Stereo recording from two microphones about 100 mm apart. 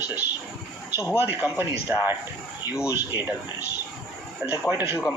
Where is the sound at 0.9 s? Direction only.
25° left (ahead or behind).